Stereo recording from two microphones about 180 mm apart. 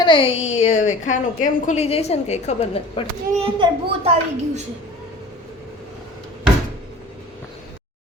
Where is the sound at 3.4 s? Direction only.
30° right (ahead or behind).